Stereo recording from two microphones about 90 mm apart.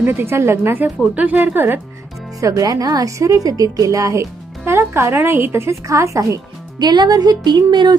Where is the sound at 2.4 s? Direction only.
40° right (ahead or behind).